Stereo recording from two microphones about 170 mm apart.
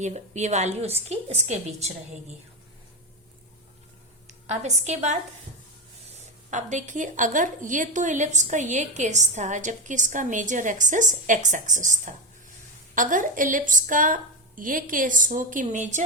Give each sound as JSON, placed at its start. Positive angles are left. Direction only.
{"t": 0.0, "sound": "a woman's voice", "side_deg": -40}
{"t": 4.3, "sound": "a woman's voice", "side_deg": -40}